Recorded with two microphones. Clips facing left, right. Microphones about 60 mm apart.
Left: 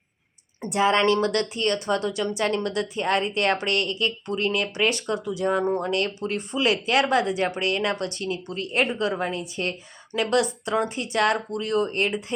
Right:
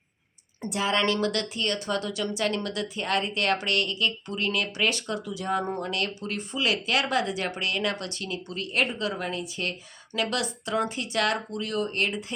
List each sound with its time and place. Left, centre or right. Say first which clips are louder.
0.6 s speech: left 5 dB; left
9.4 s speech: left 3 dB; left